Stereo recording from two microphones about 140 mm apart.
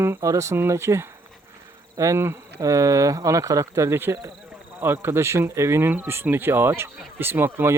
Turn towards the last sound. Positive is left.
turn(degrees=-15)  # may be behind; listen again after turning